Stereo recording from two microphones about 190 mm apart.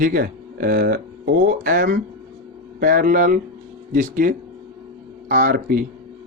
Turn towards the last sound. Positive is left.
turn(degrees=-50)  # may be behind; listen again after turning